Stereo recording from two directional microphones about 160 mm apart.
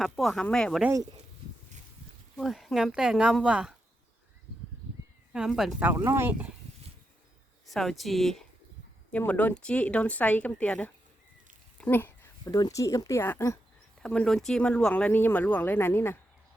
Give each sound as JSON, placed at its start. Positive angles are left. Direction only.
{"t": 0.0, "sound": "speech", "side_deg": 0}
{"t": 2.3, "sound": "speech", "side_deg": 0}
{"t": 5.3, "sound": "speech", "side_deg": -5}
{"t": 5.9, "sound": "speech", "side_deg": -15}
{"t": 7.7, "sound": "speech", "side_deg": 0}
{"t": 11.8, "sound": "a sound", "side_deg": 10}
{"t": 12.5, "sound": "speech", "side_deg": 25}
{"t": 14.0, "sound": "speech", "side_deg": 5}